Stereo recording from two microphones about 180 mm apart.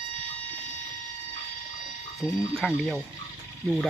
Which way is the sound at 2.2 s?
5° right (ahead or behind).